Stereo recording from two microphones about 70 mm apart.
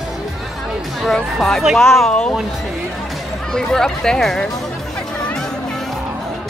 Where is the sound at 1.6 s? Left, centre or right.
Centre.